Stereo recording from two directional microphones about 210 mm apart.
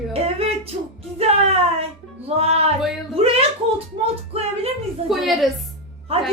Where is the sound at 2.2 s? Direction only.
30° right (ahead or behind).